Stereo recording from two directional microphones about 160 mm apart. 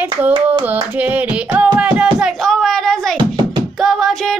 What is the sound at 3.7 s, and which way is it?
Music, centre (ahead or behind).